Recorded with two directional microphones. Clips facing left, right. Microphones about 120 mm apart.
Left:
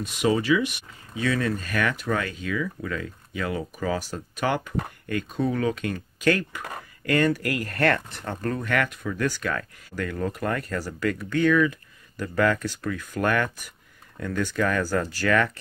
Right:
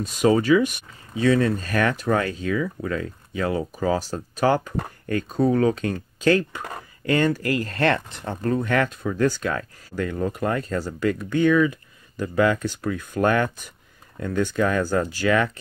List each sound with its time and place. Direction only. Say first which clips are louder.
0.0 s speech: right 4 dB; 45° right (ahead or behind)
1.1 s speech: right 6 dB; 30° right (ahead or behind)